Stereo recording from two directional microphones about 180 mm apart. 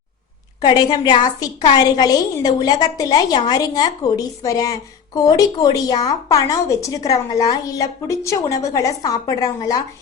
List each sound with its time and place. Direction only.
0.6 s a woman's voice: 25° left (ahead or behind)